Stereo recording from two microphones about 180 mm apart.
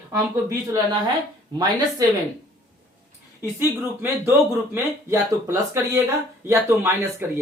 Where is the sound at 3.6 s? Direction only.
15° right (ahead or behind).